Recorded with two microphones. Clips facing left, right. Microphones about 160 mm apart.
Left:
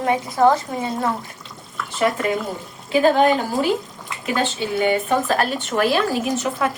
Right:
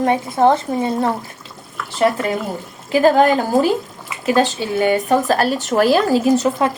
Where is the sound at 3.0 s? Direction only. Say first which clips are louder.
Right 3 dB; 40° right (ahead or behind).